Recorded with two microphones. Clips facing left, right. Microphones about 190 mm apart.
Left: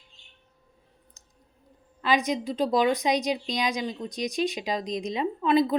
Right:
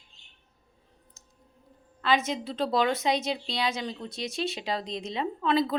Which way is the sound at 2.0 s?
15° left (ahead or behind).